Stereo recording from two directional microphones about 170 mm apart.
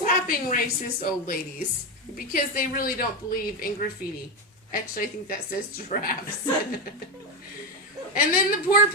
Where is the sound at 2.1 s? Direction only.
55° left (ahead or behind).